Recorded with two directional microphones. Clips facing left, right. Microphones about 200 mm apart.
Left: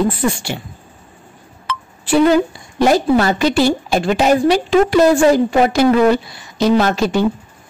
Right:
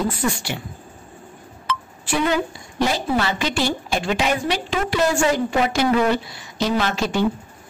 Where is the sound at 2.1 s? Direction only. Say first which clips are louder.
Left 9 dB; 35° left (ahead or behind).